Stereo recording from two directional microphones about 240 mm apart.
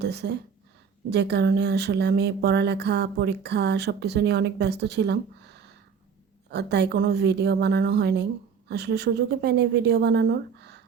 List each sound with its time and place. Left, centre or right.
0.0 s speech: right